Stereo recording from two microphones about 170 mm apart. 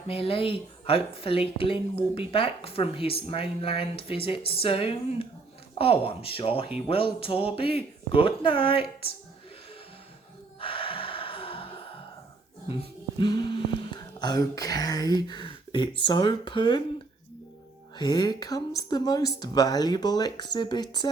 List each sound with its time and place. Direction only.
0.1 s speech: 35° left (ahead or behind)
10.6 s gasp: 30° left (ahead or behind)
13.1 s music: 25° left (ahead or behind)
13.9 s speech: 25° left (ahead or behind)
17.9 s speech: 25° left (ahead or behind)